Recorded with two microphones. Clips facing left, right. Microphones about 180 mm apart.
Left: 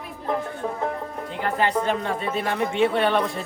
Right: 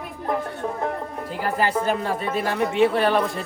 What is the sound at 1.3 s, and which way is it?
Speech, 5° right (ahead or behind).